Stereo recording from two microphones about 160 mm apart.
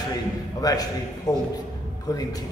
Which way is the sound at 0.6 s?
25° left (ahead or behind).